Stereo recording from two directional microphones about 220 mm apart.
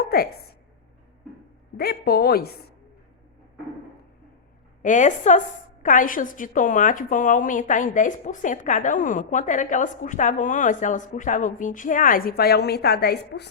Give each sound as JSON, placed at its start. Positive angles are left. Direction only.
{"t": 0.0, "sound": "a sound", "side_deg": 45}
{"t": 1.7, "sound": "a woman's voice", "side_deg": 45}
{"t": 4.8, "sound": "a woman's voice", "side_deg": 35}